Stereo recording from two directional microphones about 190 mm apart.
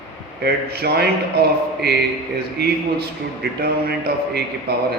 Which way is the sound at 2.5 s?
55° right (ahead or behind).